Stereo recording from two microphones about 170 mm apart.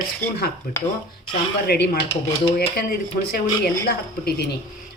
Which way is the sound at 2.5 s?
70° left (ahead or behind).